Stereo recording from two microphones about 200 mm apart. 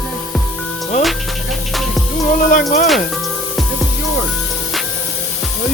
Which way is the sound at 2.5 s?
40° left (ahead or behind).